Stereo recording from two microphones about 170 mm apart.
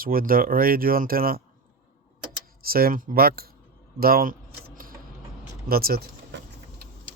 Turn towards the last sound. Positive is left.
turn(degrees=-60)  # may be behind; listen again after turning